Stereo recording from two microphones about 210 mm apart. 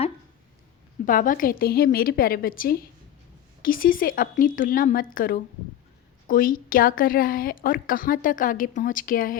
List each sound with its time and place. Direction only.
1.0 s a woman's voice: 40° left (ahead or behind)